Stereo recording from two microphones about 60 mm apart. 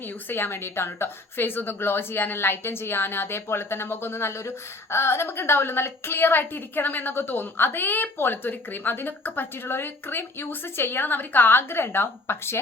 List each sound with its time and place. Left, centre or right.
0.3 s a woman's voice: left